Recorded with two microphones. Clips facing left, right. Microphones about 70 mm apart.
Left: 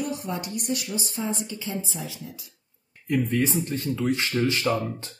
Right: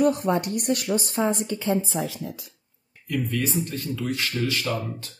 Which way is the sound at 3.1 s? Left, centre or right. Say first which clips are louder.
Left 3 dB; left.